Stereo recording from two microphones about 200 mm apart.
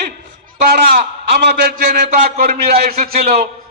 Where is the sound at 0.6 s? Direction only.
50° right (ahead or behind).